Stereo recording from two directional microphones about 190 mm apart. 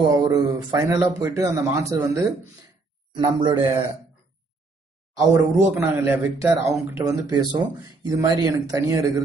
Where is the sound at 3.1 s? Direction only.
25° right (ahead or behind).